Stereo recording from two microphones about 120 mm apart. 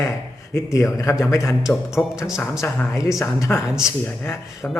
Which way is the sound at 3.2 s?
25° left (ahead or behind).